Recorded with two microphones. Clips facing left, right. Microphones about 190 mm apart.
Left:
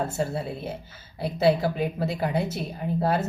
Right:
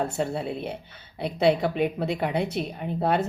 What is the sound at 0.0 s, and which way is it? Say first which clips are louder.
Speech: right 1 dB; centre (ahead or behind).